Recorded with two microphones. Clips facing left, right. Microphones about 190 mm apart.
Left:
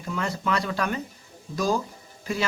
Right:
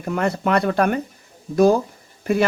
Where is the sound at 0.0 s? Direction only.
60° right (ahead or behind).